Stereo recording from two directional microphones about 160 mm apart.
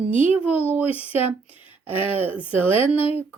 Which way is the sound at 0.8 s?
35° left (ahead or behind).